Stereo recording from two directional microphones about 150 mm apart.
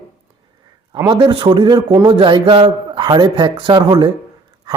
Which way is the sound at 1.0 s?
35° right (ahead or behind).